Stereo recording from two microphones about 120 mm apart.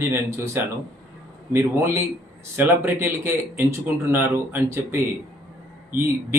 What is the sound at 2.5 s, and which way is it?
Speech, 20° right (ahead or behind).